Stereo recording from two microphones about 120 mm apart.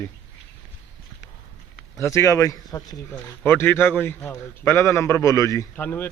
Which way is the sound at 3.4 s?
15° left (ahead or behind).